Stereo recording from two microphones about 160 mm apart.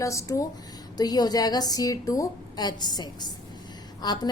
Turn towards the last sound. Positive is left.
turn(degrees=25)  # may be behind; listen again after turning